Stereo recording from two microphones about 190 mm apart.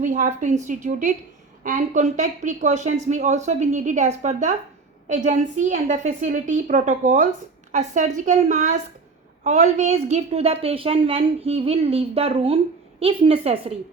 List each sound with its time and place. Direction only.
0.0 s a woman's voice: 40° right (ahead or behind)